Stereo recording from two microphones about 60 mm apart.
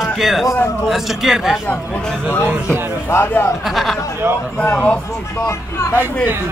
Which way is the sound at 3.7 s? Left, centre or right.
Centre.